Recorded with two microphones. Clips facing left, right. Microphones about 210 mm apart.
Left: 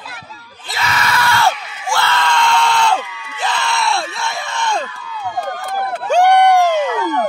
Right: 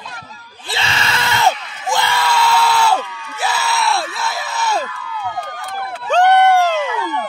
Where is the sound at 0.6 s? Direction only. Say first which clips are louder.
Left 2 dB; 30° right (ahead or behind).